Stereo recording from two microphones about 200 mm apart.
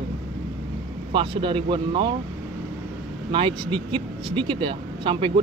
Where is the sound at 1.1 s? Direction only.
25° right (ahead or behind).